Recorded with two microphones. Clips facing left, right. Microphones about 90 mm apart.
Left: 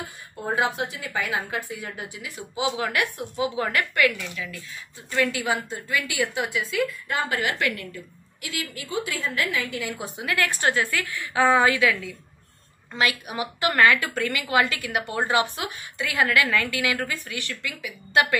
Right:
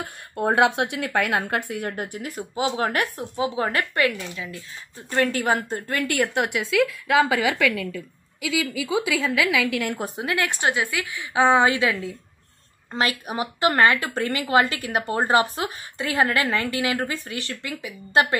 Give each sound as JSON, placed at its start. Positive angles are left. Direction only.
{"t": 0.0, "sound": "a woman's voice", "side_deg": -70}
{"t": 5.1, "sound": "a woman's voice", "side_deg": -45}
{"t": 9.1, "sound": "a woman's voice", "side_deg": -90}
{"t": 9.8, "sound": "a woman's voice", "side_deg": -45}
{"t": 10.2, "sound": "a woman's voice", "side_deg": -20}